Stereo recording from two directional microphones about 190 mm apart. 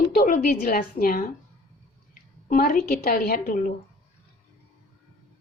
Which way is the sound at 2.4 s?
50° left (ahead or behind).